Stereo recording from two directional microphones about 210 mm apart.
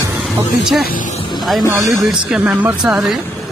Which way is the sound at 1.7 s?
15° right (ahead or behind).